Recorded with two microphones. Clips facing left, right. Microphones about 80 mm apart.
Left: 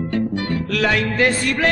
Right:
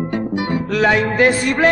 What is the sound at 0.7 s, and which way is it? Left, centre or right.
Music, right.